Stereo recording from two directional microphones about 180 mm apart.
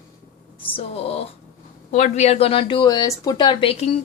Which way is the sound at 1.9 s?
40° left (ahead or behind).